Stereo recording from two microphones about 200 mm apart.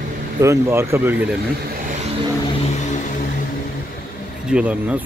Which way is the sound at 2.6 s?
35° left (ahead or behind).